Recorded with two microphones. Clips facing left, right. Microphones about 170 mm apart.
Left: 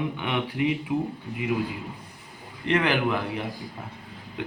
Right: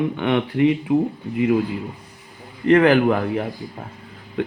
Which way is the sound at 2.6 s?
45° right (ahead or behind).